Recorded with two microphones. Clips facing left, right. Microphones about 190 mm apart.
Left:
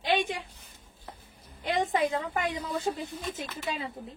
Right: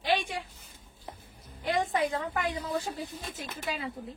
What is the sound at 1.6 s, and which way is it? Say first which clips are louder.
A woman's voice: left 1 dB; 20° left (ahead or behind).